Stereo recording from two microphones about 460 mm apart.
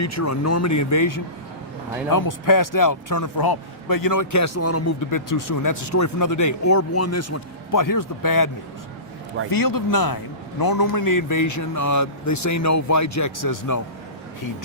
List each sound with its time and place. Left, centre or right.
0.0 s speech: left
9.5 s speech: left